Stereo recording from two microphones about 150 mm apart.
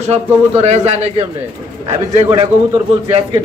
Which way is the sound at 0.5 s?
50° right (ahead or behind).